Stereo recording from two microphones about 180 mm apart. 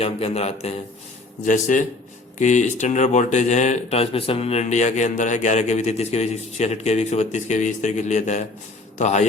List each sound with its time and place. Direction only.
0.0 s a man's voice: 35° left (ahead or behind)